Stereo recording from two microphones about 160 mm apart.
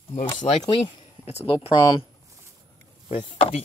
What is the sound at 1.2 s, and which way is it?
Speech, 40° left (ahead or behind).